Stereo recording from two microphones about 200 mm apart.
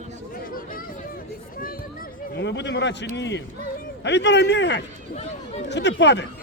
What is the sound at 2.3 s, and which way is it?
A man's voice, 60° left (ahead or behind).